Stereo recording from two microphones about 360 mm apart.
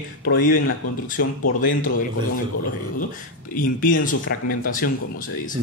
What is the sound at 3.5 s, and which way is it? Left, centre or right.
Speech, left.